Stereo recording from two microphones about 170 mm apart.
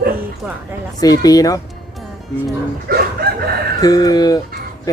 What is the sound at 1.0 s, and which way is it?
Speech, 20° left (ahead or behind).